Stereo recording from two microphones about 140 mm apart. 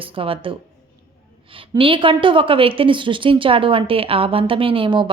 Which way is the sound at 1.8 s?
40° right (ahead or behind).